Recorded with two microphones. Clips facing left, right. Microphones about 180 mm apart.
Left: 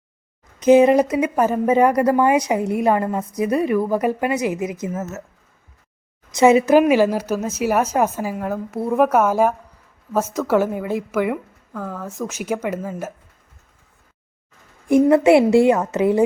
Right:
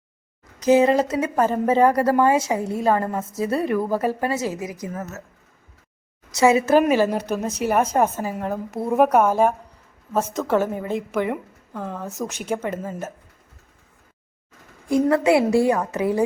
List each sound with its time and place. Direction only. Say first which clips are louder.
0.6 s a woman's voice: left 4 dB; 20° left (ahead or behind)
6.3 s a woman's voice: left 3 dB; 20° left (ahead or behind)
11.8 s a woman's voice: left 1 dB; 20° right (ahead or behind)
12.3 s a woman's voice: left 4 dB; 10° left (ahead or behind)
15.1 s a woman's voice: left 4 dB; 25° left (ahead or behind)